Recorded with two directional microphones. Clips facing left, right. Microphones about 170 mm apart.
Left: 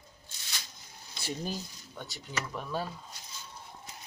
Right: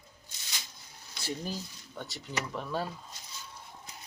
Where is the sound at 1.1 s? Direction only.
20° left (ahead or behind).